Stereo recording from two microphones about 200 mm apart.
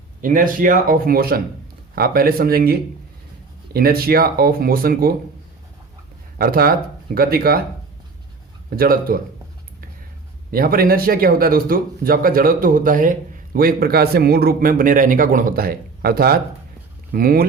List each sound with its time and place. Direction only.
0.2 s speech: 45° right (ahead or behind)
6.4 s speech: 45° right (ahead or behind)
8.7 s speech: 45° right (ahead or behind)
10.5 s speech: 50° right (ahead or behind)